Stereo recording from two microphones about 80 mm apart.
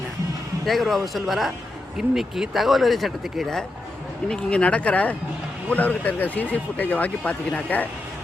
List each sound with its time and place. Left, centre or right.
0.6 s speech: centre
4.3 s speech: centre